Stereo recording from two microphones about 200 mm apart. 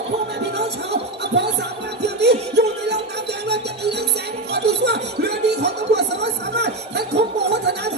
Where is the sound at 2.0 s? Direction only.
55° right (ahead or behind).